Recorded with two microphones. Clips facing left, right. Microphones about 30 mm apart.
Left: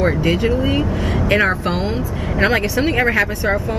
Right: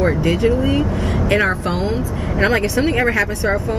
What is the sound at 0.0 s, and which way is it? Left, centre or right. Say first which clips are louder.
Speech: right 1 dB; centre.